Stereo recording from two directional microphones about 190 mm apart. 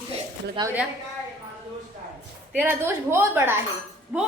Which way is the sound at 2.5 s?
10° right (ahead or behind).